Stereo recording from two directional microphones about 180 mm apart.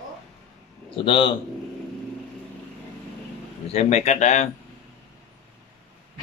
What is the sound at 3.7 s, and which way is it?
Speech, 40° left (ahead or behind).